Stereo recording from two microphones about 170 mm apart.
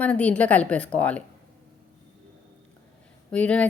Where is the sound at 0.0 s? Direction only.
5° left (ahead or behind).